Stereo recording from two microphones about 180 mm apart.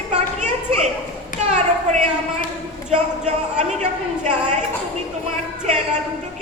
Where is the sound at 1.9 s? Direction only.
40° right (ahead or behind).